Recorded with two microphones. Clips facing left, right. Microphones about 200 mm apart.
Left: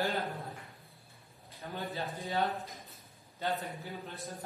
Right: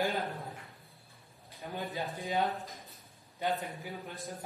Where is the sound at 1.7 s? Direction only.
15° right (ahead or behind).